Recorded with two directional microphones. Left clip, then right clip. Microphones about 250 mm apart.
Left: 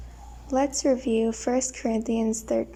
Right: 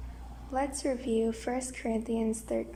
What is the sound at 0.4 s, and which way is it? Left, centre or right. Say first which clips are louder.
A woman's voice: left 8 dB; centre.